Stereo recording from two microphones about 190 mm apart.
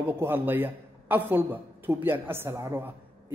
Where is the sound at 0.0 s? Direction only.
10° right (ahead or behind).